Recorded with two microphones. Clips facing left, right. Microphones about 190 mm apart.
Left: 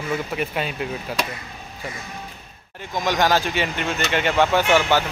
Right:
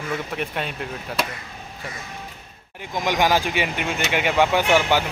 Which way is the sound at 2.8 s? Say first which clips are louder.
Even; 15° right (ahead or behind).